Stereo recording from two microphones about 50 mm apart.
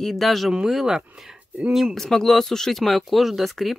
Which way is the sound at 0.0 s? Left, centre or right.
Centre.